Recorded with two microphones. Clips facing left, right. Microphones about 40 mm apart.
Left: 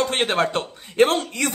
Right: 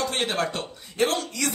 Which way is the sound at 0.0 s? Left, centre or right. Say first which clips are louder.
Left 5 dB; left.